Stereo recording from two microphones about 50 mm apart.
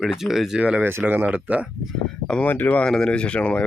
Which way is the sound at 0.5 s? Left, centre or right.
Centre.